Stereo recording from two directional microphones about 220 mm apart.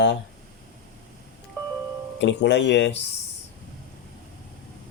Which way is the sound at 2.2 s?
55° left (ahead or behind).